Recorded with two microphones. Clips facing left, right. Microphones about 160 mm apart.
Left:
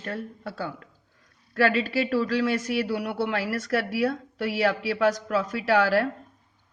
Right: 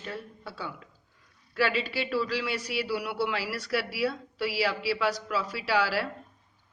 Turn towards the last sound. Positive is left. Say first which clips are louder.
# left 6 dB
turn(degrees=45)  # may be behind; listen again after turning